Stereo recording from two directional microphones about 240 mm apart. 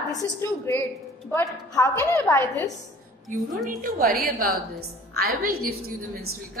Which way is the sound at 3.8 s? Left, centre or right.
Right.